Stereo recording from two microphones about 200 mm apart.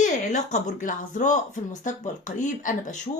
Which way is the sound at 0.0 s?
40° left (ahead or behind).